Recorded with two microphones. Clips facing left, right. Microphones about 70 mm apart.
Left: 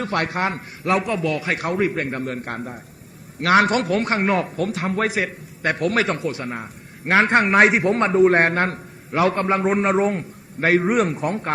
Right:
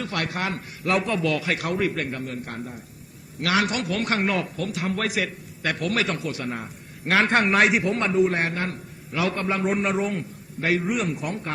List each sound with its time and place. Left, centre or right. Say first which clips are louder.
0.0 s a man's voice: left 5 dB; left